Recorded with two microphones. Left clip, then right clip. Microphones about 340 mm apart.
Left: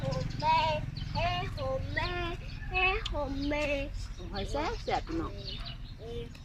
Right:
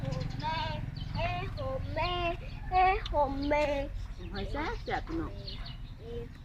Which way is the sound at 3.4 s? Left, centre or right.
Right.